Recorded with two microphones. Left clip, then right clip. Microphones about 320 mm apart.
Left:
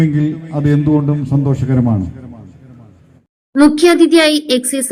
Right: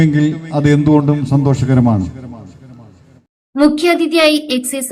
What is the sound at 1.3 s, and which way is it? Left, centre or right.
Speech, right.